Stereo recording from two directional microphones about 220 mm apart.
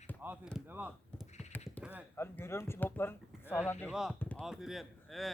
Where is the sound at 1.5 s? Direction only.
10° left (ahead or behind).